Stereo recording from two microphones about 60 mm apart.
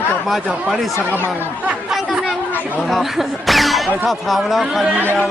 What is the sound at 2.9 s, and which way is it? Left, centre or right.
Speech, centre.